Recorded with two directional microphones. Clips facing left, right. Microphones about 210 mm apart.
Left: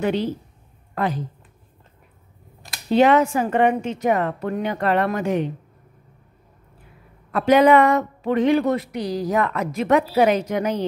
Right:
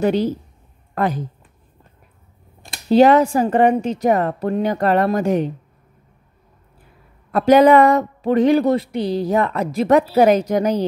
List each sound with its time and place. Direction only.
0.0 s a woman's voice: 40° right (ahead or behind)
2.7 s a woman's voice: 35° right (ahead or behind)
7.3 s a woman's voice: 40° right (ahead or behind)